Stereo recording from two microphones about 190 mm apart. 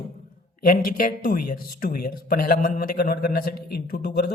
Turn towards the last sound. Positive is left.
turn(degrees=55)  # may be behind; listen again after turning